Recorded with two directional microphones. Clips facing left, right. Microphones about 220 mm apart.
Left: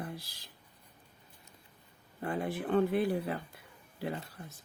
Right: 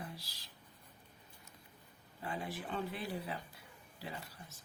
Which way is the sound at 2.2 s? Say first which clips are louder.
Left 8 dB; 55° left (ahead or behind).